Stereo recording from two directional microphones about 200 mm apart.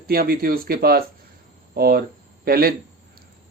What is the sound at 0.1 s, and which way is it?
Speech, 50° right (ahead or behind).